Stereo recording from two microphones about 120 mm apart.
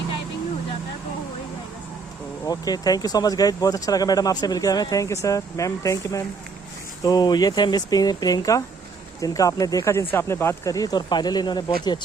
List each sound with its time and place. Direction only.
2.5 s speech: 30° left (ahead or behind)